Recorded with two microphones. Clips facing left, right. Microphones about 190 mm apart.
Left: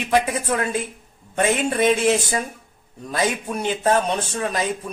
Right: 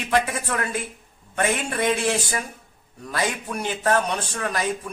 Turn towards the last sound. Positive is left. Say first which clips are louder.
# left 3 dB
turn(degrees=20)  # may be behind; listen again after turning